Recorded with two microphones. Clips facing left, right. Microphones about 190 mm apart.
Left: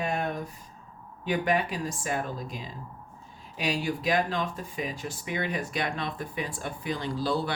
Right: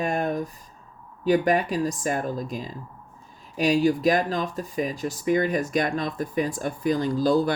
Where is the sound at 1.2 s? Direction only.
40° right (ahead or behind).